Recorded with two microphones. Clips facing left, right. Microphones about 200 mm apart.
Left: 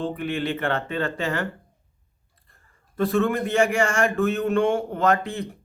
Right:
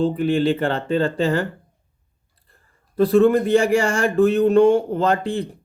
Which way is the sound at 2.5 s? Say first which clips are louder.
Right 2 dB; 35° right (ahead or behind).